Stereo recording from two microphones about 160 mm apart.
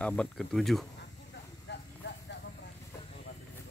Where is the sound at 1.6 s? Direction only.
90° left.